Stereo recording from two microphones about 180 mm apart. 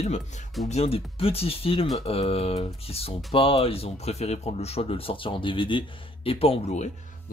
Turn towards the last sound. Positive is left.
turn(degrees=40)  # may be behind; listen again after turning